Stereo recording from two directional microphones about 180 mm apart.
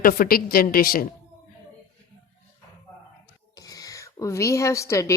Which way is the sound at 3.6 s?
20° left (ahead or behind).